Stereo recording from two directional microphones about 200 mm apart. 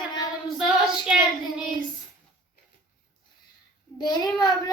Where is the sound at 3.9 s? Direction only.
20° left (ahead or behind).